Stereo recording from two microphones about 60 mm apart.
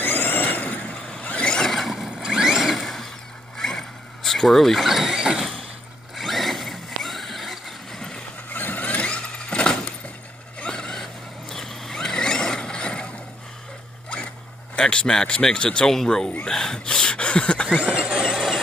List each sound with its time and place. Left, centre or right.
0.0 s vehicle: left
1.6 s vehicle: centre
2.1 s vehicle: centre
2.8 s a sound: centre
3.5 s vehicle: centre
6.1 s zipper: centre
8.5 s vehicle: left
14.8 s speech: centre
16.4 s a sound: centre
17.8 s vehicle: centre
18.1 s a sound: centre